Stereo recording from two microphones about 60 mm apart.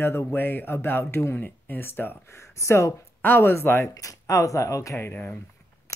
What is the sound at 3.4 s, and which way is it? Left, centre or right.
Speech, left.